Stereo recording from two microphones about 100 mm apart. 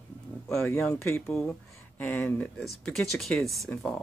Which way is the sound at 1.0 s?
25° left (ahead or behind).